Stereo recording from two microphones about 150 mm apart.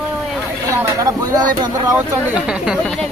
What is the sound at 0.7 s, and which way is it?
Speech, 20° right (ahead or behind).